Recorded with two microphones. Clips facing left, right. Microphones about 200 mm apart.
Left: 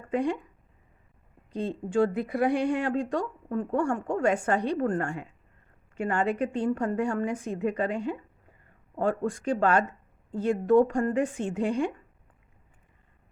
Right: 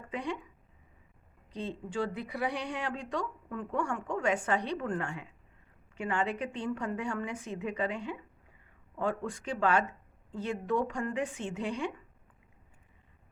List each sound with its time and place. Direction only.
0.1 s speech: 45° left (ahead or behind)
1.9 s speech: 50° left (ahead or behind)